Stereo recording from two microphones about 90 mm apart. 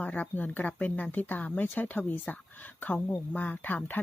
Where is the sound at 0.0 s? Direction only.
15° left (ahead or behind).